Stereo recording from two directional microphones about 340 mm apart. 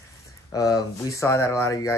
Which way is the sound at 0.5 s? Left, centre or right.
Centre.